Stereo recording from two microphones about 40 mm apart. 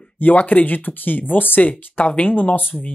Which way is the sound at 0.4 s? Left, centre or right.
Left.